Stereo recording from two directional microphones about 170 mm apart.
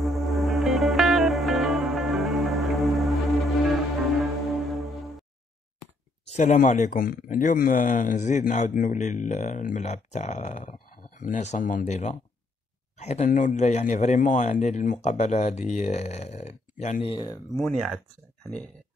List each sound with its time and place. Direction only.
0.0 s music: centre (ahead or behind)
6.2 s speech: 45° left (ahead or behind)
17.6 s speech: 5° left (ahead or behind)